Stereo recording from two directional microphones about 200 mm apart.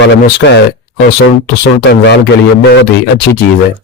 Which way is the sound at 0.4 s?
55° left (ahead or behind).